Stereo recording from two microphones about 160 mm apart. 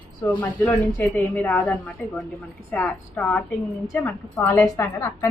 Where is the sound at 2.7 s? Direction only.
10° left (ahead or behind).